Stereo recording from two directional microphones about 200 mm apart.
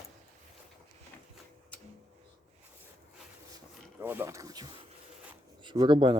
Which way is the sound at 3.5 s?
10° right (ahead or behind).